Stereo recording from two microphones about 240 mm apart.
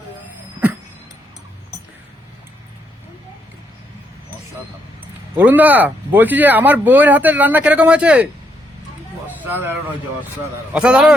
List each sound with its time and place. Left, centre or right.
5.3 s speech: centre
9.4 s speech: centre
10.8 s a man's voice: centre